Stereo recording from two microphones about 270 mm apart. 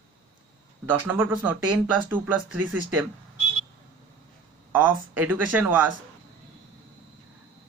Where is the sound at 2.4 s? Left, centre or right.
Right.